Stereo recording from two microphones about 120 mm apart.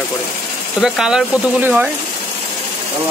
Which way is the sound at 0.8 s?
5° right (ahead or behind).